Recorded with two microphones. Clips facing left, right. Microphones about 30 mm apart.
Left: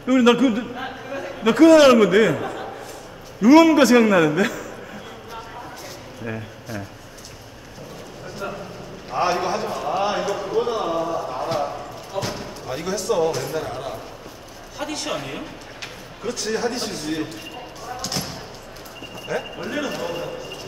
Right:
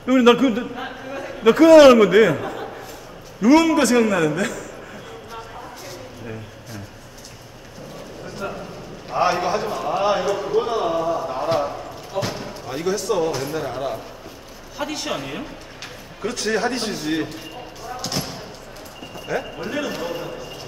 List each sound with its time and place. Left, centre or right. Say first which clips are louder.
0.0 s a man's voice: right 1 dB; centre
8.4 s a sound: right 1 dB; centre
14.8 s a man's voice: right 1 dB; centre
16.2 s a man's voice: right 2 dB; centre
16.9 s a man's voice: right 3 dB; centre
17.8 s basketball bounce: right 1 dB; centre
19.2 s a man's voice: right 1 dB; centre